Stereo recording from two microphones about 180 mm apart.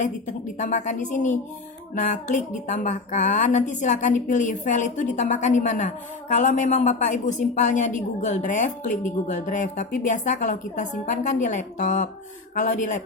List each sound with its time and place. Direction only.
0.0 s speech: 45° left (ahead or behind)